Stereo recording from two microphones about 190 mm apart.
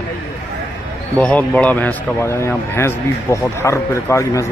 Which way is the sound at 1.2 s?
5° left (ahead or behind).